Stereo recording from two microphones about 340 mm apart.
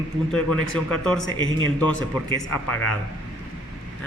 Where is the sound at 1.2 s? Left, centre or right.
Left.